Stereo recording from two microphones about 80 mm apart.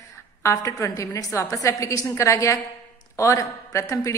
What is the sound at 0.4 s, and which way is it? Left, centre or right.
A woman's voice, left.